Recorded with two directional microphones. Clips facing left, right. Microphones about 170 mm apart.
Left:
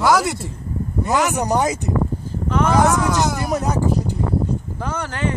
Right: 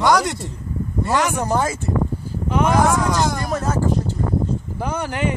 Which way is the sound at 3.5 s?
15° left (ahead or behind).